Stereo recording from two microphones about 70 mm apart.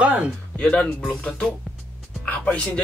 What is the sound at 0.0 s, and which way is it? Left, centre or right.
Speech, centre.